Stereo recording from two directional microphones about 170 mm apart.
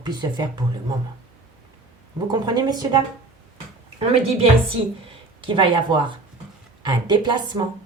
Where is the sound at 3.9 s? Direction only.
35° right (ahead or behind).